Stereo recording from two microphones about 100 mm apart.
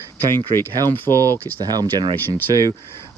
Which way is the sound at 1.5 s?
45° right (ahead or behind).